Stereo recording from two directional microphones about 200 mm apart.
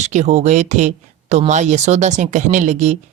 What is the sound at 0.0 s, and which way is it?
Speech, 35° right (ahead or behind).